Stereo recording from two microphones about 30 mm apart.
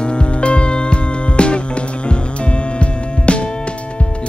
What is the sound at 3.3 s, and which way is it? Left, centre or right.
Music, left.